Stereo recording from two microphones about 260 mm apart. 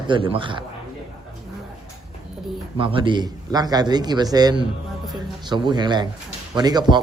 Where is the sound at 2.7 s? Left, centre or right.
Centre.